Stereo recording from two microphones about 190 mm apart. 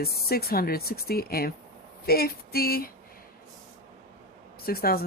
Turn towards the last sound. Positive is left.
turn(degrees=50)  # may be behind; listen again after turning